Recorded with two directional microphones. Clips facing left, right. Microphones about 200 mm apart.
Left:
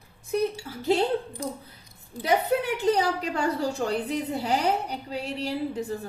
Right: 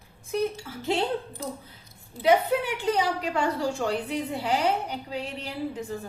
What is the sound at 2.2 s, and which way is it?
A woman's voice, 40° left (ahead or behind).